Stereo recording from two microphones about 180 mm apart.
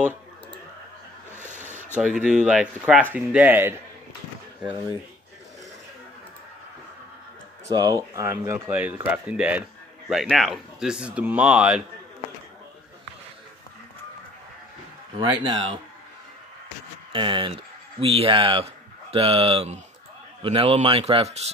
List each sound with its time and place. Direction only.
1.5 s a sound: 45° right (ahead or behind)
2.0 s speech: 5° right (ahead or behind)
7.7 s speech: 20° right (ahead or behind)
15.1 s speech: 25° right (ahead or behind)
17.1 s a man's voice: 30° right (ahead or behind)